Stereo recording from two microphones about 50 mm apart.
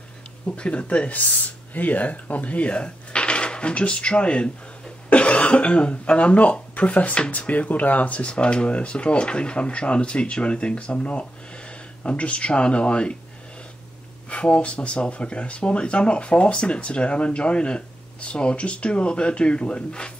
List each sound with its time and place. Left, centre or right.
0.5 s speech: left
14.3 s speech: left